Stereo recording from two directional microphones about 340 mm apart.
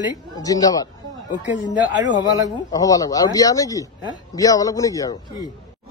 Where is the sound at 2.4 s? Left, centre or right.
Centre.